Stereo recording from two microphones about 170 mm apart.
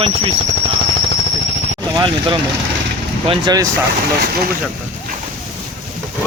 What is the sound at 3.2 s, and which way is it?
Speech, 25° right (ahead or behind).